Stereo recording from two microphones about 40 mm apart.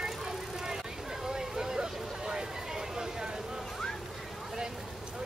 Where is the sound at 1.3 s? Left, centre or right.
Centre.